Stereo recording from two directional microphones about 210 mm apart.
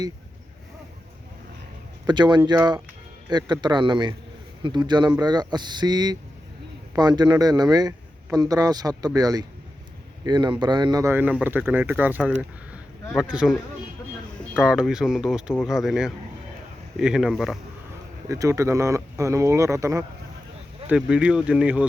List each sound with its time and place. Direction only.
2.0 s speech: 20° right (ahead or behind); by 17.6 s centre (ahead or behind)
18.3 s speech: 15° right (ahead or behind)